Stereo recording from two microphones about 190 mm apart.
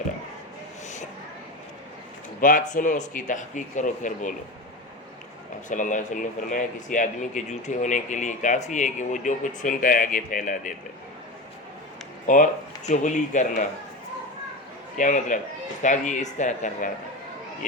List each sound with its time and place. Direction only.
2.4 s speech: 45° left (ahead or behind)
5.6 s speech: 40° left (ahead or behind)
12.2 s speech: 45° left (ahead or behind)
14.9 s speech: 40° left (ahead or behind)